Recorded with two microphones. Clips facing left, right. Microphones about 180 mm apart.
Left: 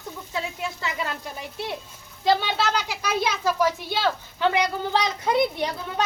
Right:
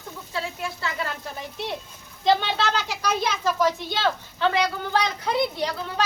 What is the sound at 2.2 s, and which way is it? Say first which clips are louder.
A child's voice: even; 10° left (ahead or behind).